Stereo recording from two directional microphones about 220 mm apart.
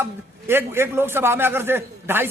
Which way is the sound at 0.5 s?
10° right (ahead or behind).